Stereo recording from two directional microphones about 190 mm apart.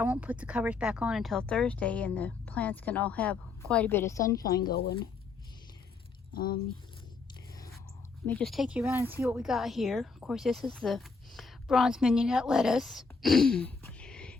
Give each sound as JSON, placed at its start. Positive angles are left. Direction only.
{"t": 0.0, "sound": "speech", "side_deg": -5}
{"t": 4.4, "sound": "speech", "side_deg": 50}
{"t": 6.3, "sound": "speech", "side_deg": 50}
{"t": 8.3, "sound": "speech", "side_deg": 5}